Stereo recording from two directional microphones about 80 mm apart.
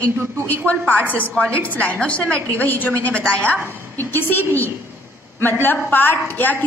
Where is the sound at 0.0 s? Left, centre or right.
Centre.